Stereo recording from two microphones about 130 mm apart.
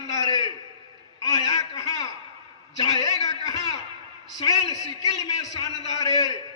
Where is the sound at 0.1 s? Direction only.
30° left (ahead or behind).